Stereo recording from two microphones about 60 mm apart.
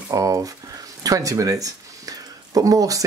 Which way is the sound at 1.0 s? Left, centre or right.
Right.